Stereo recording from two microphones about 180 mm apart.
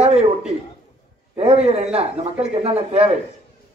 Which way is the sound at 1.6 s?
35° right (ahead or behind).